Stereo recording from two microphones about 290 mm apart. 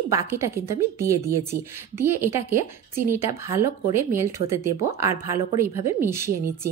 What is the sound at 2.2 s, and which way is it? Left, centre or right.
A woman's voice, centre.